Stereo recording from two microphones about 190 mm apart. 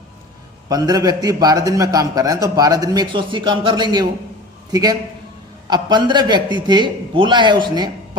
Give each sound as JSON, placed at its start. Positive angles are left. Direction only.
{"t": 0.7, "sound": "a man's voice", "side_deg": -20}